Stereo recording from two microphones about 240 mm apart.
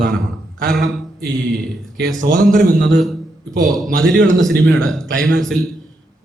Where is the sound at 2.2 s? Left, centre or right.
Right.